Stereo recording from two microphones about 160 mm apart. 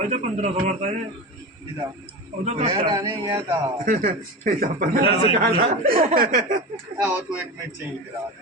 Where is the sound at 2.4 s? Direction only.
45° right (ahead or behind).